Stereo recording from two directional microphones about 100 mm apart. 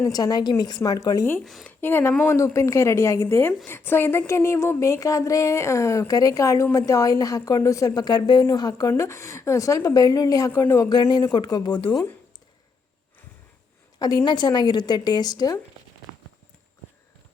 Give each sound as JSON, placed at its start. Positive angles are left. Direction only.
{"t": 0.0, "sound": "speech", "side_deg": 40}
{"t": 1.8, "sound": "a woman's voice", "side_deg": 20}
{"t": 8.9, "sound": "a woman's voice", "side_deg": 30}
{"t": 14.0, "sound": "a woman's voice", "side_deg": 45}